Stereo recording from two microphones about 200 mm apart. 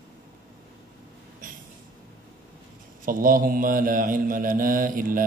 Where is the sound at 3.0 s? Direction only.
45° right (ahead or behind).